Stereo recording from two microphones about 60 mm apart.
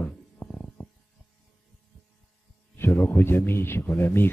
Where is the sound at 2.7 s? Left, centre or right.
Left.